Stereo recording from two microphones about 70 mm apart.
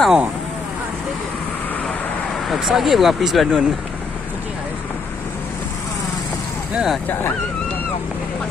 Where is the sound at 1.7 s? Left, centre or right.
Centre.